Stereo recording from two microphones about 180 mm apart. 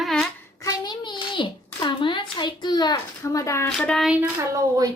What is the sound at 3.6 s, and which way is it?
Child singing, 5° left (ahead or behind).